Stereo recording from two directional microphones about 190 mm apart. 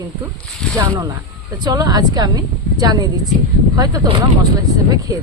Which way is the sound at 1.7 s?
20° right (ahead or behind).